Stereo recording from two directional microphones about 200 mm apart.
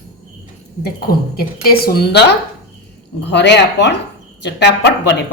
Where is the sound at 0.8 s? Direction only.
50° left (ahead or behind).